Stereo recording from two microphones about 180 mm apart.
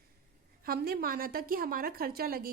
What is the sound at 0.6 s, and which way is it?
A woman's voice, 55° right (ahead or behind).